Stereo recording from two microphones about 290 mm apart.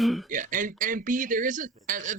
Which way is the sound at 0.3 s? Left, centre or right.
Right.